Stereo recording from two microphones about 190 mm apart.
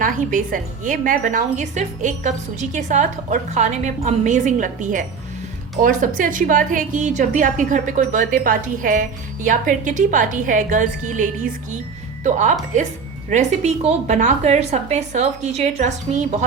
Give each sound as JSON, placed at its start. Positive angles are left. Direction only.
{"t": 0.0, "sound": "a woman's voice", "side_deg": -45}